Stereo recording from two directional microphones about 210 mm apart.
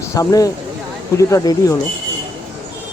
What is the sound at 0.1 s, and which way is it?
Speech, 15° left (ahead or behind).